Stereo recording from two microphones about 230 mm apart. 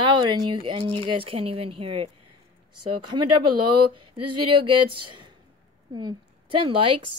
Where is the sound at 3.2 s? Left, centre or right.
Right.